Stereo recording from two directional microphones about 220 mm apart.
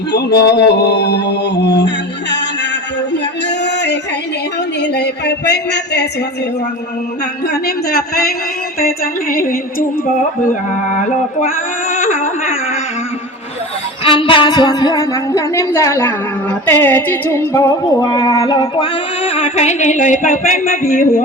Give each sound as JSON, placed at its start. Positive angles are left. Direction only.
{"t": 0.1, "sound": "mantra", "side_deg": 50}
{"t": 3.6, "sound": "a sound", "side_deg": 50}
{"t": 7.4, "sound": "mantra", "side_deg": 45}
{"t": 9.3, "sound": "music", "side_deg": 40}
{"t": 11.0, "sound": "a sound", "side_deg": 35}
{"t": 14.0, "sound": "a woman's voice", "side_deg": 25}